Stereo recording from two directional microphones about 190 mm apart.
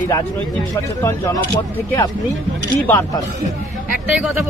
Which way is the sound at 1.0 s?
15° left (ahead or behind).